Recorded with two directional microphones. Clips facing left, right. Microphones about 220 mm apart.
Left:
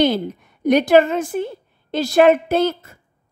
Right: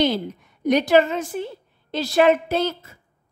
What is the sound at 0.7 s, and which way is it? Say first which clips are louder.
A woman's voice: left 3 dB; 55° left (ahead or behind).